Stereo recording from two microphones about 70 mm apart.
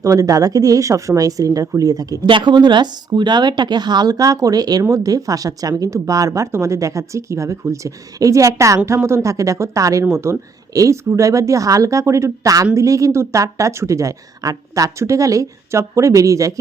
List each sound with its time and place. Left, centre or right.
0.0 s speech: right
4.8 s speech: right